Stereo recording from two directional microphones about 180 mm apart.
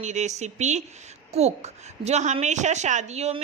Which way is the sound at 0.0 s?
40° right (ahead or behind).